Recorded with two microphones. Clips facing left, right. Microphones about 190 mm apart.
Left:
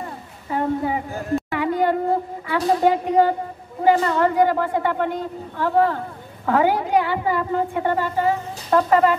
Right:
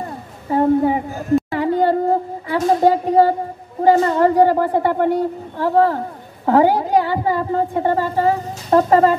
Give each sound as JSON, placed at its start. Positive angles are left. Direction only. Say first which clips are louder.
{"t": 0.5, "sound": "a woman's voice", "louder": "right 7 dB", "side_deg": -30}
{"t": 1.5, "sound": "a sound", "louder": "right 4 dB", "side_deg": -35}
{"t": 3.8, "sound": "a woman's voice", "louder": "right 4 dB", "side_deg": -35}